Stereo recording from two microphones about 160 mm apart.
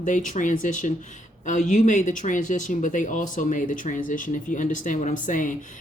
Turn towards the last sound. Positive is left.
turn(degrees=55)  # may be behind; listen again after turning